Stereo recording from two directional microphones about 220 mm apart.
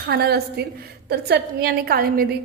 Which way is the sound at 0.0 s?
45° right (ahead or behind).